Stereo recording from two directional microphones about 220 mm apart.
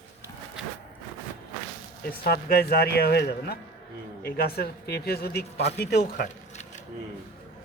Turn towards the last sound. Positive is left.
turn(degrees=35)  # may be behind; listen again after turning